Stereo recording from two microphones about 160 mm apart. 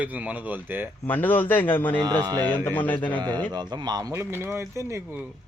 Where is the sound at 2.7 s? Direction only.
10° left (ahead or behind).